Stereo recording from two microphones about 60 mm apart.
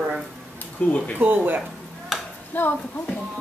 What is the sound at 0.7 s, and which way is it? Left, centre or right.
Speech, left.